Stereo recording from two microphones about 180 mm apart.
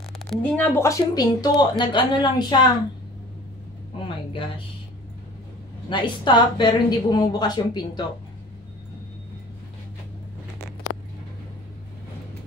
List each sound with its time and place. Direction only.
0.3 s speech: 5° left (ahead or behind); by 2.7 s 25° left (ahead or behind)
5.9 s speech: 25° left (ahead or behind)